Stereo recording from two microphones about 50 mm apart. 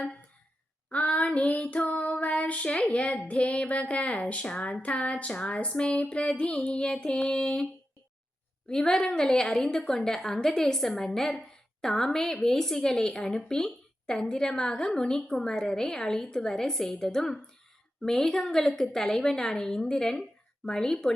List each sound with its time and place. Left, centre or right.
0.9 s child singing: left
3.2 s a sound: left
8.7 s a woman's voice: centre